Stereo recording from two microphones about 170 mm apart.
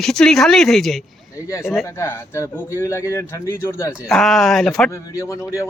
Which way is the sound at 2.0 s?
15° left (ahead or behind).